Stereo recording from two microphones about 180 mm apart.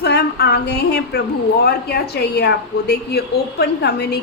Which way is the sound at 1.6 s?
65° left (ahead or behind).